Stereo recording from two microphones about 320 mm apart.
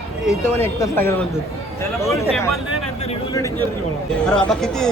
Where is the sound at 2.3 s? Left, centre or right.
Centre.